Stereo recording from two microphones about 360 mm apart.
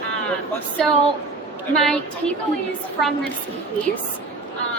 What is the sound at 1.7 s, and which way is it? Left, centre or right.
Speech, centre.